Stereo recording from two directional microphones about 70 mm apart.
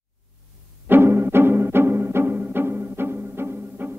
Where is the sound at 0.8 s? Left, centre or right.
Right.